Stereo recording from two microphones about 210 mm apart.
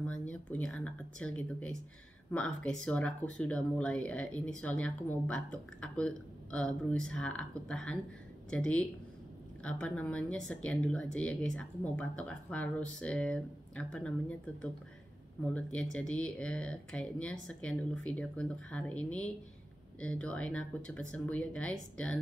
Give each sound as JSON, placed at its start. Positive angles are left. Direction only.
{"t": 0.0, "sound": "speech", "side_deg": 5}